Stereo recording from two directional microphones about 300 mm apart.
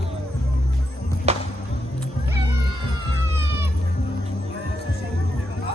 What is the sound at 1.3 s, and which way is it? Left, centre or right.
Music, right.